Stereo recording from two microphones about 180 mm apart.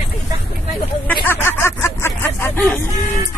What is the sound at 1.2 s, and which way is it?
Speech, 10° left (ahead or behind).